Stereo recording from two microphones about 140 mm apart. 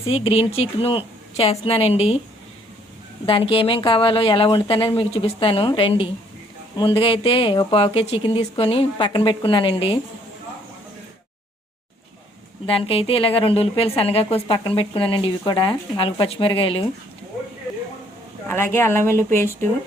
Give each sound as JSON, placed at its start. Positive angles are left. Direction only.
{"t": 0.0, "sound": "speech", "side_deg": 40}
{"t": 3.2, "sound": "a woman's voice", "side_deg": 40}
{"t": 12.6, "sound": "a woman's voice", "side_deg": 40}
{"t": 18.4, "sound": "speech", "side_deg": 15}